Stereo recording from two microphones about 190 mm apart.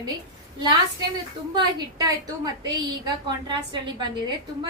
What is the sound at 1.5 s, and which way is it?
A woman's voice, 20° right (ahead or behind).